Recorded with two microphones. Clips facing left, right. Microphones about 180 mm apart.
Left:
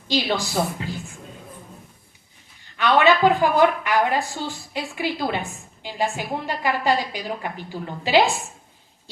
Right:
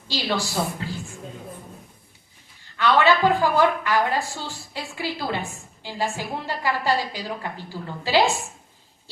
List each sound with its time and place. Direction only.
0.1 s a woman's voice: 20° left (ahead or behind)
2.7 s a woman's voice: 20° left (ahead or behind)